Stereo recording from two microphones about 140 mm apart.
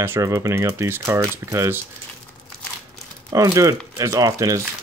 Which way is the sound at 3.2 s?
25° right (ahead or behind).